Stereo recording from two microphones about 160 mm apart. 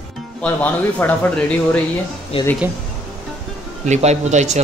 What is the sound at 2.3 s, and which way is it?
Speech, 35° left (ahead or behind).